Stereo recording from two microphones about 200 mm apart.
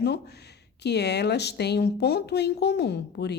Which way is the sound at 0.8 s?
55° left (ahead or behind).